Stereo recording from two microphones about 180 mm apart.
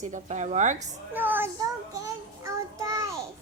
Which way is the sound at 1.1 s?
10° right (ahead or behind).